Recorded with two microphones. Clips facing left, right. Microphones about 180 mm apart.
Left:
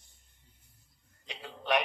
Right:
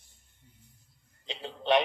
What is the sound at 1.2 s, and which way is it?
Speech, 25° right (ahead or behind).